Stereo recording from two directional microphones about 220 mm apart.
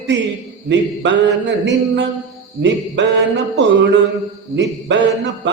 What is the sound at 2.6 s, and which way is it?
Mantra, 50° right (ahead or behind).